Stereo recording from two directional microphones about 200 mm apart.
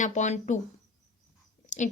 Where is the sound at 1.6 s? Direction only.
35° left (ahead or behind).